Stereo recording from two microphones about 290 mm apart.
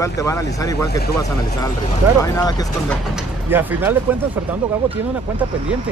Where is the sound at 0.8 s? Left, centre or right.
Left.